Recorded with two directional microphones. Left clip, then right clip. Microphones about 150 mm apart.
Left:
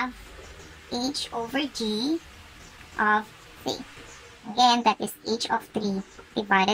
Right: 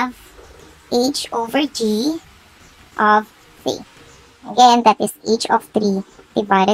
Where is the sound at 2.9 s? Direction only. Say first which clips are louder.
Right 9 dB; 20° right (ahead or behind).